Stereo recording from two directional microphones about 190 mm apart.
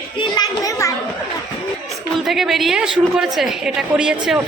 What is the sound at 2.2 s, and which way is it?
A woman's voice, centre (ahead or behind).